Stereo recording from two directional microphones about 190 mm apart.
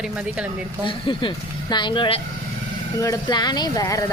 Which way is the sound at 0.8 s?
25° left (ahead or behind).